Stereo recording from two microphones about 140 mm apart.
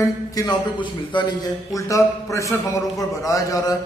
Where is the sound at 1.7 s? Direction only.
20° left (ahead or behind).